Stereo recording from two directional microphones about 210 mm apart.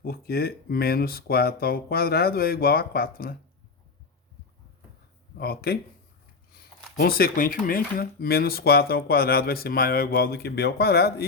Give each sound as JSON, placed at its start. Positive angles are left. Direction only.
{"t": 0.0, "sound": "speech", "side_deg": 45}
{"t": 5.4, "sound": "speech", "side_deg": 45}
{"t": 7.0, "sound": "speech", "side_deg": 45}